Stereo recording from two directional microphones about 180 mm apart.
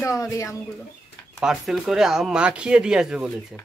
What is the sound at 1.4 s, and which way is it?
Speech, 5° right (ahead or behind).